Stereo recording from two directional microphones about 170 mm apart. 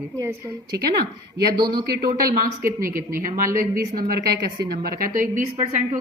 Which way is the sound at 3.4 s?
55° right (ahead or behind).